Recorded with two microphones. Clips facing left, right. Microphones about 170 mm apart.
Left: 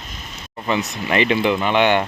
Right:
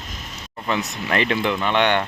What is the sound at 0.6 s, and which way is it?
Speech, centre (ahead or behind).